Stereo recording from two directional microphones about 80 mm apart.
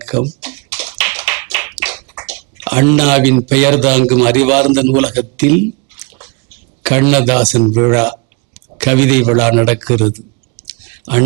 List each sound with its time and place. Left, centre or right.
0.0 s tap: right
6.8 s a man's voice: right
10.7 s whispering: right